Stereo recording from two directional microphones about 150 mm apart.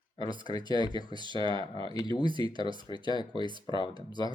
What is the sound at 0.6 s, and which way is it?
Speech, 30° left (ahead or behind).